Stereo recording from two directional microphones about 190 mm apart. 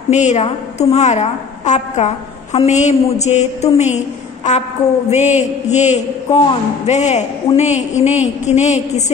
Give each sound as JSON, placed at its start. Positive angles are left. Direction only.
{"t": 0.1, "sound": "a man's voice", "side_deg": 35}